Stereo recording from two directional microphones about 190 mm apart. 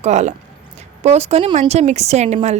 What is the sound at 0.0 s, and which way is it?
A woman's voice, 35° right (ahead or behind).